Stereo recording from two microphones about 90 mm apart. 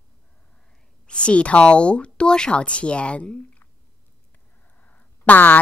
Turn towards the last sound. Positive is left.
turn(degrees=20)  # may be behind; listen again after turning